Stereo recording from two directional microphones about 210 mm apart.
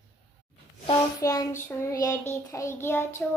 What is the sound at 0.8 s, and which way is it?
Child singing, 15° left (ahead or behind).